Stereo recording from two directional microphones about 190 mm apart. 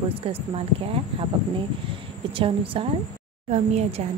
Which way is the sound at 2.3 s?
30° right (ahead or behind).